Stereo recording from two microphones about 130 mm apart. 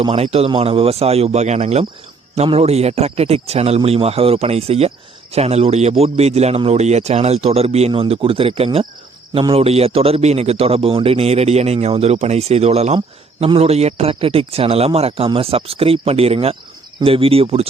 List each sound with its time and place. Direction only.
0.0 s a man's voice: 45° right (ahead or behind)